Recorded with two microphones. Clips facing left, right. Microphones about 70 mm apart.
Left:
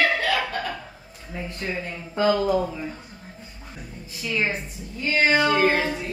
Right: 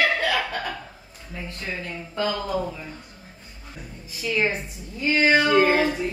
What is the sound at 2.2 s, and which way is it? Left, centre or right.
Speech, centre.